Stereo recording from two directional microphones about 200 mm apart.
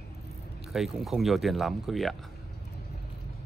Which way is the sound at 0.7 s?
Centre (ahead or behind).